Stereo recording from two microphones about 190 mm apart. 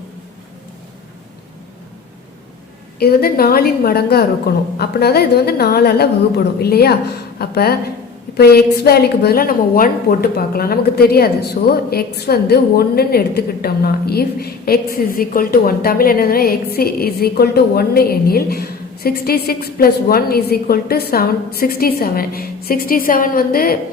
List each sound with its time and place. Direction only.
3.0 s a woman's voice: 55° left (ahead or behind)